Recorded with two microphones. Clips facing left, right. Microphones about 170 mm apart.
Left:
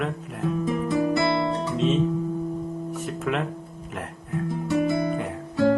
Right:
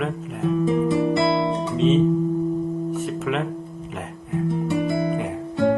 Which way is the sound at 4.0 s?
Centre (ahead or behind).